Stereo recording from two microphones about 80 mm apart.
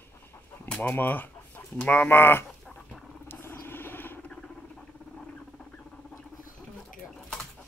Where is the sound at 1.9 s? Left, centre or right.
Left.